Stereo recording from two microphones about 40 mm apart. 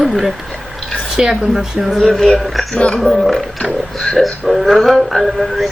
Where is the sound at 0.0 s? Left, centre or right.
Centre.